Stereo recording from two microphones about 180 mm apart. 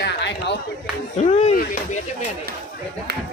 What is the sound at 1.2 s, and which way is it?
Speech, 40° left (ahead or behind).